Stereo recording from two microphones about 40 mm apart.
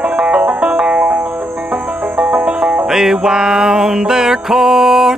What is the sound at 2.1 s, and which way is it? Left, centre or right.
Banjo, right.